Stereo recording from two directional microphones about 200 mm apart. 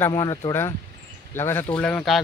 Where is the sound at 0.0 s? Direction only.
20° left (ahead or behind).